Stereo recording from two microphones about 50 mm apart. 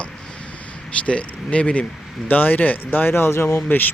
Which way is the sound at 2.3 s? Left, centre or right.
Left.